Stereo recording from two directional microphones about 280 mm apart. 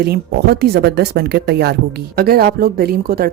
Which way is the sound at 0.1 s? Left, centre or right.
Right.